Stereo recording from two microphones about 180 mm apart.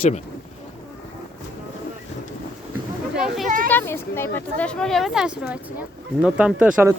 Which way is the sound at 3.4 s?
50° right (ahead or behind).